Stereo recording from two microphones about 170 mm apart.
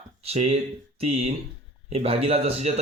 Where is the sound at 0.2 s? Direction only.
40° right (ahead or behind).